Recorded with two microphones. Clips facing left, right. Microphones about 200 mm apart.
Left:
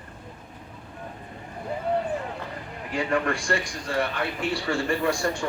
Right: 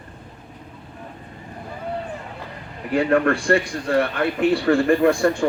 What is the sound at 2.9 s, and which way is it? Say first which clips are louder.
A man's voice: right 8 dB; 60° right (ahead or behind).